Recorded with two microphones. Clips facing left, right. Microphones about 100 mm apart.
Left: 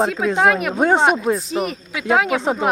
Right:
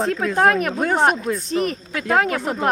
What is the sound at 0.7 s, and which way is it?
Speech, 25° left (ahead or behind).